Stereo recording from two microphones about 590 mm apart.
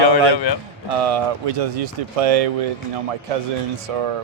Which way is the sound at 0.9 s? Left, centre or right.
Right.